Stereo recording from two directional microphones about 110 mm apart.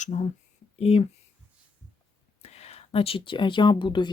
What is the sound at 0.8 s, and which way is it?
Speech, 65° left (ahead or behind).